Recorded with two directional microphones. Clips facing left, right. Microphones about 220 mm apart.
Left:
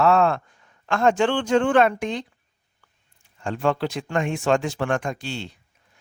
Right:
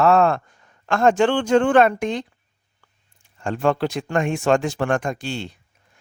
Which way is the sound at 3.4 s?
45° right (ahead or behind).